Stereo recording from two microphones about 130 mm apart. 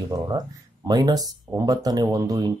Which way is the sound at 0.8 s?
30° right (ahead or behind).